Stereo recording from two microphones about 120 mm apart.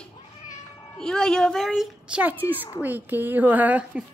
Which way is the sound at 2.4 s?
20° left (ahead or behind).